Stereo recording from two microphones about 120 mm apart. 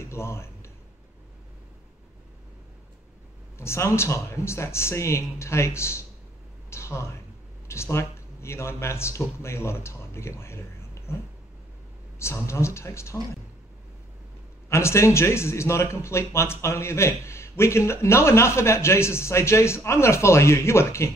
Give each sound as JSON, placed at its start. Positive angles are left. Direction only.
{"t": 0.0, "sound": "a sound", "side_deg": 25}
{"t": 3.5, "sound": "a man's voice", "side_deg": 20}
{"t": 6.7, "sound": "a sound", "side_deg": 25}
{"t": 7.6, "sound": "speech", "side_deg": 20}
{"t": 12.2, "sound": "a man's voice", "side_deg": 20}
{"t": 14.7, "sound": "a man's voice", "side_deg": 25}